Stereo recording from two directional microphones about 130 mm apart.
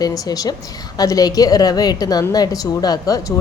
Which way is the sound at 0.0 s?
30° left (ahead or behind).